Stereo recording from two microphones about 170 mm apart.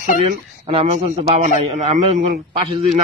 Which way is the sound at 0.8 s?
45° right (ahead or behind).